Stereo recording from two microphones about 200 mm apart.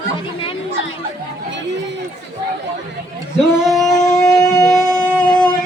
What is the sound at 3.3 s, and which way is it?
Singing, centre (ahead or behind).